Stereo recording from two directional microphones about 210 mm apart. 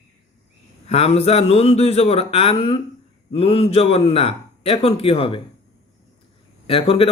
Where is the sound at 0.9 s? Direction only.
30° left (ahead or behind).